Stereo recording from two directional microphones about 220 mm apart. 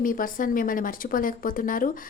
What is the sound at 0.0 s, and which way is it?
A woman's voice, 40° left (ahead or behind).